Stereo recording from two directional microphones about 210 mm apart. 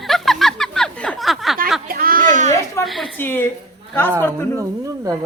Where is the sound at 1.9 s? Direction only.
45° right (ahead or behind).